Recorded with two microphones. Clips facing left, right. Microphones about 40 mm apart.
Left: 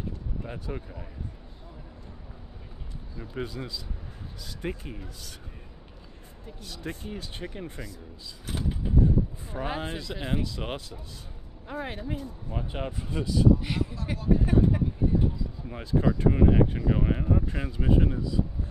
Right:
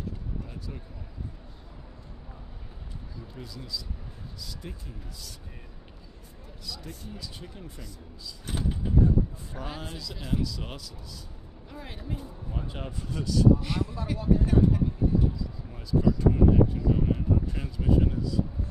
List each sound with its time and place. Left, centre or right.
0.4 s speech: left
3.3 s speech: left
6.6 s speech: left
8.5 s vehicle: centre
9.7 s speech: left
12.4 s speech: centre
14.3 s a sound: centre
15.7 s speech: left